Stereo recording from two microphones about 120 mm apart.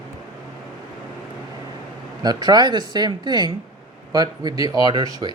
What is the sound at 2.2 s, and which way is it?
Speech, 35° right (ahead or behind).